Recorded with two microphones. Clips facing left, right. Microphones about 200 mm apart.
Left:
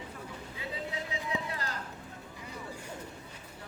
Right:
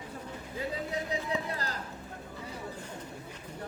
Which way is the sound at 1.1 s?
35° right (ahead or behind).